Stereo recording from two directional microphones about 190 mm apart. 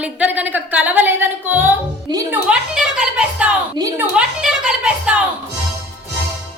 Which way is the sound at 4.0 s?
5° right (ahead or behind).